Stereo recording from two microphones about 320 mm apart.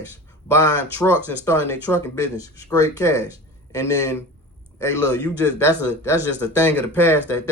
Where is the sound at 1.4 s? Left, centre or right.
Centre.